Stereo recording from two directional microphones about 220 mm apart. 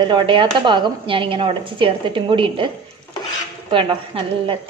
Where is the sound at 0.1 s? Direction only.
20° right (ahead or behind).